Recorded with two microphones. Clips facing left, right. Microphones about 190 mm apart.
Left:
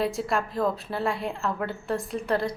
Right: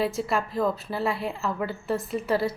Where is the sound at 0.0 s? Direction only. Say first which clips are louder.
Even; centre (ahead or behind).